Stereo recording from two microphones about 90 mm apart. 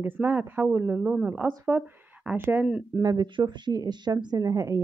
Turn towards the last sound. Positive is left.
turn(degrees=-35)  # may be behind; listen again after turning